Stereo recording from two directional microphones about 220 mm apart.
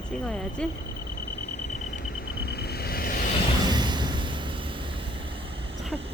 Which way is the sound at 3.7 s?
20° right (ahead or behind).